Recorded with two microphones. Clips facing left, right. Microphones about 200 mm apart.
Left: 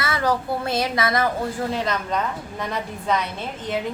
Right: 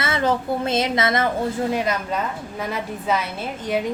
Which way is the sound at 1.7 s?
10° right (ahead or behind).